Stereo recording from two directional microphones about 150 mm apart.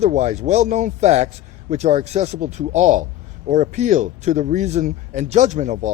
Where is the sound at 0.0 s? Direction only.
50° right (ahead or behind).